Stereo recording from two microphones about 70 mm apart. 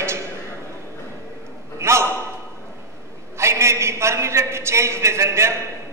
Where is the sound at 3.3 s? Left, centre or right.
Right.